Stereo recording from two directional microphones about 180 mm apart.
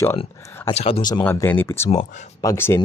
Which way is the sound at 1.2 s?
10° left (ahead or behind).